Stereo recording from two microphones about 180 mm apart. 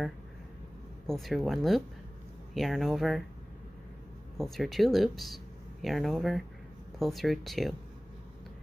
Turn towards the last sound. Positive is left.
turn(degrees=0)  # may be behind; listen again after turning